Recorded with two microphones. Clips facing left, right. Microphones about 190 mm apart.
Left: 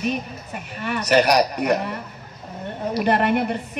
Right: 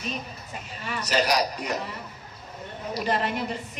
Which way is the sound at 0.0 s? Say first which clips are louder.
Left 9 dB; 60° left (ahead or behind).